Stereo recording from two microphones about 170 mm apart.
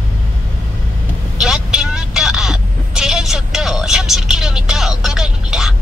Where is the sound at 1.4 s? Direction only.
5° right (ahead or behind).